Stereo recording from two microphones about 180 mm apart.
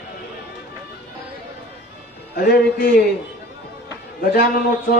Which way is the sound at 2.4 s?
55° left (ahead or behind).